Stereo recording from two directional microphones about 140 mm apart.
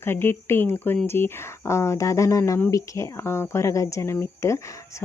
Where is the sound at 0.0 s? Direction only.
15° left (ahead or behind).